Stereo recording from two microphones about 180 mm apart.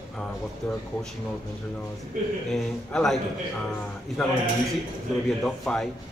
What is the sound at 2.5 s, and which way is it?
Speech, centre (ahead or behind).